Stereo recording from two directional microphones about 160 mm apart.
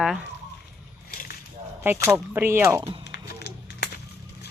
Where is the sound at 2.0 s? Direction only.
15° right (ahead or behind).